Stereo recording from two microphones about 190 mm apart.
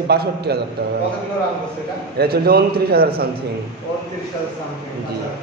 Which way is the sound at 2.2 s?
55° right (ahead or behind).